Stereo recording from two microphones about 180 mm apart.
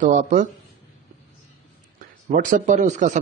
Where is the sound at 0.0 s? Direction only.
40° right (ahead or behind).